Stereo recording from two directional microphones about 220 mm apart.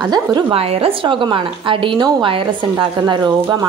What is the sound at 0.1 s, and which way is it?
A woman's voice, 20° right (ahead or behind).